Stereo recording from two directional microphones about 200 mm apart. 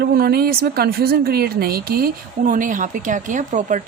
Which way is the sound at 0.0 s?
50° right (ahead or behind).